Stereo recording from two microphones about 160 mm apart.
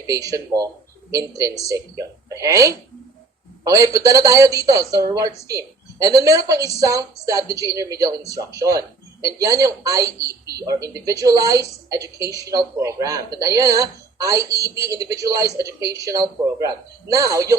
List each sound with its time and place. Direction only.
0.1 s speech: 20° right (ahead or behind)